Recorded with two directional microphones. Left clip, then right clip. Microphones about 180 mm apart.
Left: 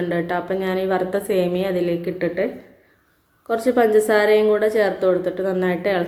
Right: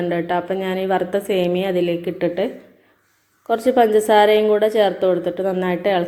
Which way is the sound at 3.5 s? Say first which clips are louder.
Right 2 dB; 15° right (ahead or behind).